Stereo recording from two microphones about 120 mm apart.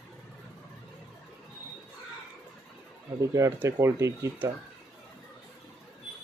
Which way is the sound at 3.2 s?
25° right (ahead or behind).